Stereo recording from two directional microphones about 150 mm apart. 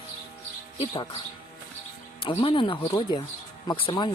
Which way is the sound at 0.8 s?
40° left (ahead or behind).